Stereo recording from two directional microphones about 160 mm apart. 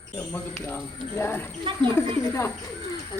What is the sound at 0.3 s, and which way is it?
Speech, 15° left (ahead or behind).